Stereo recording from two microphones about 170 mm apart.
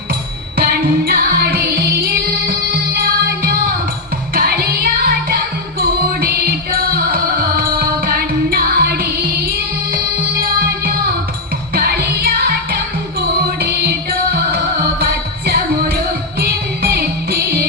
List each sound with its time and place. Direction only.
0.5 s music: 65° right (ahead or behind)